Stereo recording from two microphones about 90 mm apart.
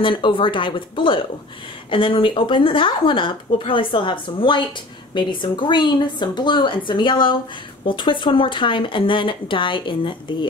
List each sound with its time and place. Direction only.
0.0 s a woman's voice: 65° left (ahead or behind)